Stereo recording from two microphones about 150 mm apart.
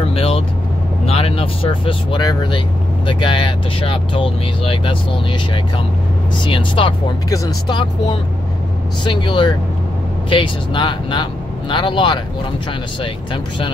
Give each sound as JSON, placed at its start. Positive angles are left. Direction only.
{"t": 0.0, "sound": "vehicle", "side_deg": 40}
{"t": 1.0, "sound": "speech", "side_deg": 40}
{"t": 6.4, "sound": "speech", "side_deg": 35}